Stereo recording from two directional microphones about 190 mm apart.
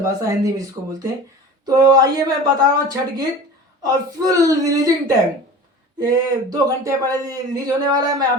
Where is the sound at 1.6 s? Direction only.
20° right (ahead or behind).